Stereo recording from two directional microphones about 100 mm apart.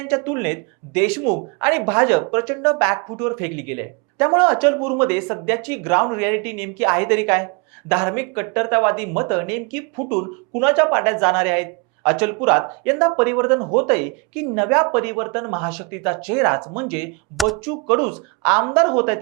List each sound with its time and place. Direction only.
0.0 s a woman's voice: 20° right (ahead or behind)
17.3 s speech: centre (ahead or behind)
17.7 s speech: 15° right (ahead or behind)